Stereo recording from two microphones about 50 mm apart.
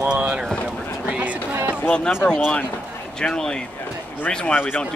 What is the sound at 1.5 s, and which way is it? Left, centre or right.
Run, right.